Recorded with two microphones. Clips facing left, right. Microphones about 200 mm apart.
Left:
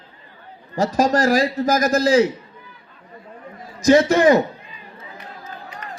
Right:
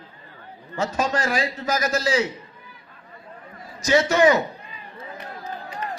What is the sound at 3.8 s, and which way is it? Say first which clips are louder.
Speech: left 4 dB; 45° left (ahead or behind).